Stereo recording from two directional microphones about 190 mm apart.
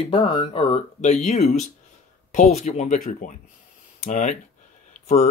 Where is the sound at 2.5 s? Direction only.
35° left (ahead or behind).